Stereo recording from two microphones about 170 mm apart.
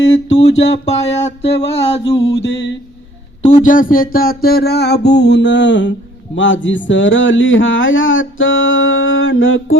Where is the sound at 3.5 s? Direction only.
45° left (ahead or behind); by 5.9 s 90° left.